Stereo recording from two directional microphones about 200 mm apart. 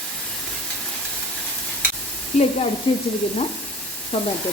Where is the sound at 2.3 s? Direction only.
30° left (ahead or behind).